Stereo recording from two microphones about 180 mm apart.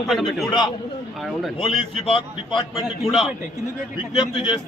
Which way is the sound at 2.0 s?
25° left (ahead or behind).